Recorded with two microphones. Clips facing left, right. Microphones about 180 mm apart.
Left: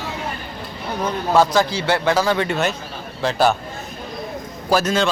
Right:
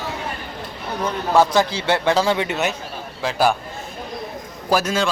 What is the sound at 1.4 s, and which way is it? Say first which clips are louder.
A man's voice: even; 20° right (ahead or behind).